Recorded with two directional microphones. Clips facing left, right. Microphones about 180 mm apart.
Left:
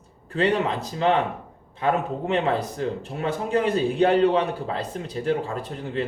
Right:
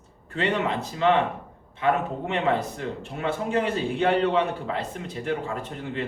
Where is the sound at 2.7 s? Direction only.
35° left (ahead or behind).